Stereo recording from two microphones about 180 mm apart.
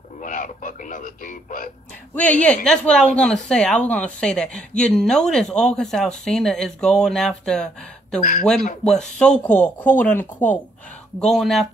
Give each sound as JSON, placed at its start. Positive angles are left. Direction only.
{"t": 0.2, "sound": "radio", "side_deg": 45}
{"t": 2.4, "sound": "a woman's voice", "side_deg": 5}
{"t": 8.2, "sound": "speech", "side_deg": 45}
{"t": 8.9, "sound": "a woman's voice", "side_deg": 5}